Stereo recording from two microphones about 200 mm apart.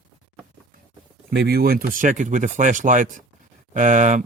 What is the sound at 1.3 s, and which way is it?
Speech, 50° right (ahead or behind).